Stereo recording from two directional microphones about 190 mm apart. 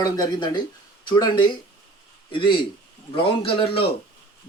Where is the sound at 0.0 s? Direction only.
25° left (ahead or behind).